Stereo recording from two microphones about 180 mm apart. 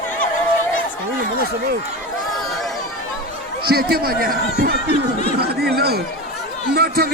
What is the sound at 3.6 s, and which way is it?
A man's voice, 60° right (ahead or behind).